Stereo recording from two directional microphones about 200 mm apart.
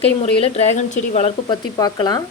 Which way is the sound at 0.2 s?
30° left (ahead or behind).